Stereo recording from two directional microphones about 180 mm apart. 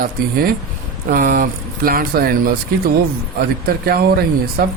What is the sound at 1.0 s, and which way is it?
Speech, 50° right (ahead or behind).